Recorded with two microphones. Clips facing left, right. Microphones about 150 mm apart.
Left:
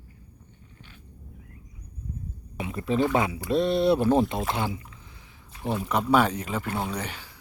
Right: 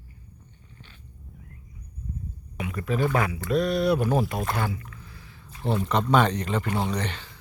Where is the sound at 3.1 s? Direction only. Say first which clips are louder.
Left 1 dB; 20° left (ahead or behind).